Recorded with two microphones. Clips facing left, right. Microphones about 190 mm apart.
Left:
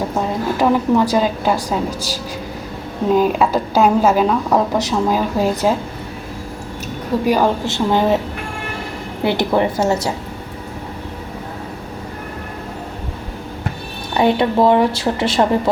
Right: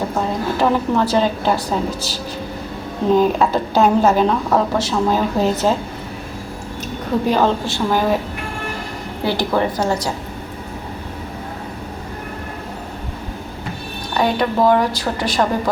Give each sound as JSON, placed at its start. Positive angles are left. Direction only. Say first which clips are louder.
{"t": 0.5, "sound": "speech", "louder": "left 3 dB", "side_deg": 15}
{"t": 3.1, "sound": "speech", "louder": "even", "side_deg": 10}
{"t": 7.3, "sound": "speech", "louder": "left 1 dB", "side_deg": 10}
{"t": 9.2, "sound": "speech", "louder": "left 2 dB", "side_deg": 20}
{"t": 14.1, "sound": "speech", "louder": "left 3 dB", "side_deg": 25}